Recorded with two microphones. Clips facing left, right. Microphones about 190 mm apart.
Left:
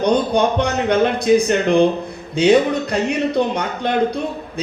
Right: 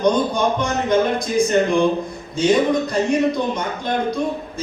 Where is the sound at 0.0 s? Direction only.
65° left (ahead or behind).